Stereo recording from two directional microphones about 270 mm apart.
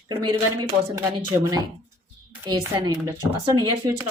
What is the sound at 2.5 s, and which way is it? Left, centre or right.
A woman's voice, centre.